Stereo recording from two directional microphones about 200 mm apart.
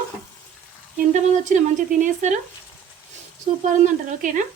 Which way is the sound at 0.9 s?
40° right (ahead or behind).